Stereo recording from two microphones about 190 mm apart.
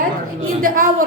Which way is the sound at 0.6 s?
45° right (ahead or behind).